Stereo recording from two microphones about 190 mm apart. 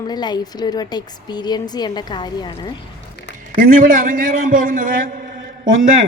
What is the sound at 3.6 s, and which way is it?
A man's voice, 45° right (ahead or behind).